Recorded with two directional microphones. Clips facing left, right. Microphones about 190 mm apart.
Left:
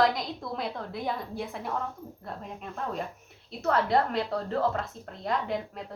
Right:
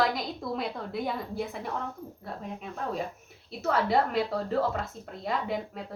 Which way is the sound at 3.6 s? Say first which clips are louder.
Left 1 dB; 5° right (ahead or behind).